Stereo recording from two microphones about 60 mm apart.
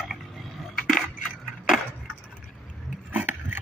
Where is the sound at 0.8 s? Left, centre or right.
Centre.